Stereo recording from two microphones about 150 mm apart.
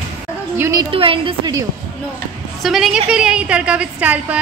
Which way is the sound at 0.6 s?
20° right (ahead or behind).